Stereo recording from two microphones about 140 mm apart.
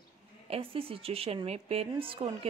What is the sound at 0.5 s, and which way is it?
A woman's voice, 40° right (ahead or behind).